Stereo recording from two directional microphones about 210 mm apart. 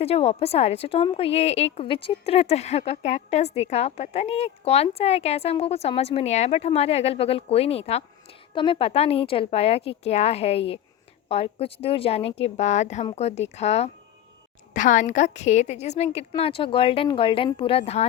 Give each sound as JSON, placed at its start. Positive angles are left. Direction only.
{"t": 0.0, "sound": "a woman's voice", "side_deg": 30}